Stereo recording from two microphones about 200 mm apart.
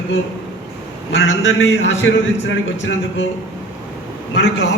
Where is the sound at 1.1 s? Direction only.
70° left (ahead or behind).